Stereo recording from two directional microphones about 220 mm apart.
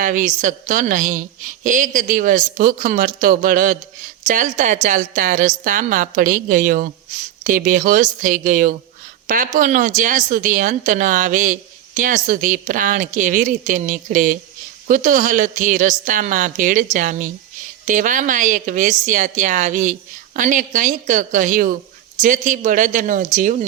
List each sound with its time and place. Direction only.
0.0 s a woman's voice: 35° right (ahead or behind)